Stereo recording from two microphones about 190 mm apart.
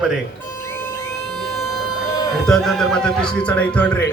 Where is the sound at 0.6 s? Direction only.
15° left (ahead or behind).